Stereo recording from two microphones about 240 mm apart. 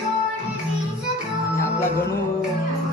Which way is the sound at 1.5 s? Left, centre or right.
Centre.